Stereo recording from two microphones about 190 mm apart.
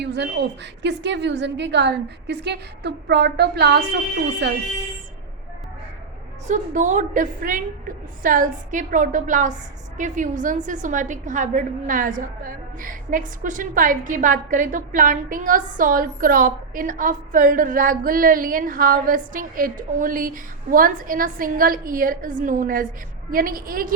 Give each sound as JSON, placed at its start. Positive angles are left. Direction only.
{"t": 0.0, "sound": "a woman's voice", "side_deg": -65}
{"t": 6.5, "sound": "a woman's voice", "side_deg": -40}